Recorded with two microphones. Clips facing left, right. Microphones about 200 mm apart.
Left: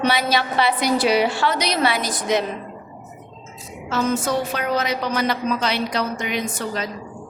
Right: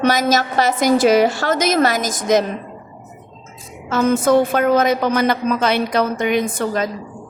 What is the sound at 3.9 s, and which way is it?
A woman's voice, 50° right (ahead or behind).